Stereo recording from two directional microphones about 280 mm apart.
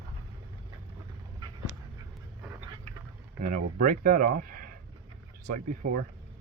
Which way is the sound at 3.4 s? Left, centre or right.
Right.